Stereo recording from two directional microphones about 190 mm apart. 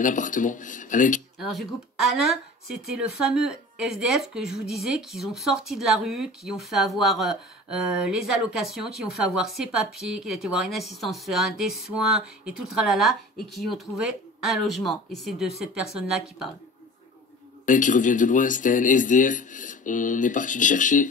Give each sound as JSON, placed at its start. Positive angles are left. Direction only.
{"t": 0.0, "sound": "speech", "side_deg": 45}
{"t": 1.5, "sound": "a woman's voice", "side_deg": 0}
{"t": 17.6, "sound": "speech", "side_deg": 45}